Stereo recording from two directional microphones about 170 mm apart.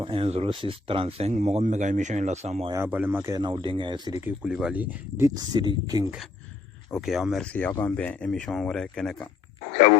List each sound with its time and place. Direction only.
0.0 s speech: 30° right (ahead or behind)
2.6 s speech: 15° right (ahead or behind)
4.2 s speech: 5° right (ahead or behind); by 6.1 s 20° right (ahead or behind)
6.9 s speech: centre (ahead or behind)
7.7 s speech: 10° left (ahead or behind)